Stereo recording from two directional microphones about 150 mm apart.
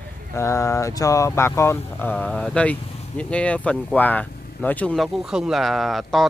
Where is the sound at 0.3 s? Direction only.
20° left (ahead or behind).